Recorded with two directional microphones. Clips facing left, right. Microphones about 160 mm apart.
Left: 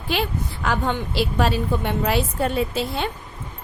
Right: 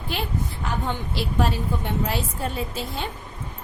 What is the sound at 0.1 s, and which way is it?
A woman's voice, 90° left.